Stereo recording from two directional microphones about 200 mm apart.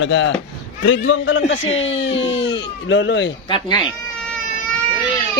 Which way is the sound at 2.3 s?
65° left (ahead or behind).